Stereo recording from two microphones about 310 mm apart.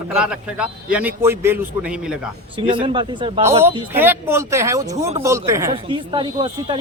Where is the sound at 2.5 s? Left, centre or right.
Centre.